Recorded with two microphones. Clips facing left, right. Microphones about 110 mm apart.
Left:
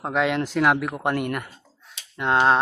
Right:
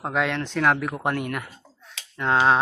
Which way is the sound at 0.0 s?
Centre (ahead or behind).